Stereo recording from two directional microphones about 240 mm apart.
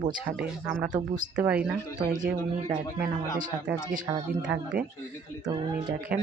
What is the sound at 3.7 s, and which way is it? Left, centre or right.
Speech, centre.